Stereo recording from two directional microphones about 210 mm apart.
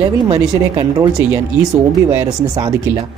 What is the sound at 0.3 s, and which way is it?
Speech, 15° right (ahead or behind).